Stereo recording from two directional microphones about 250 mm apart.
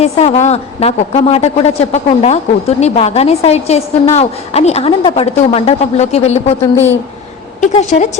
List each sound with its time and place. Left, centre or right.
0.0 s a woman's voice: left
7.6 s a woman's voice: left